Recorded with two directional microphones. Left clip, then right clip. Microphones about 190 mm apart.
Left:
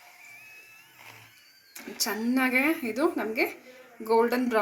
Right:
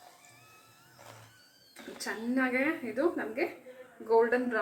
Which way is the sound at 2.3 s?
60° left (ahead or behind).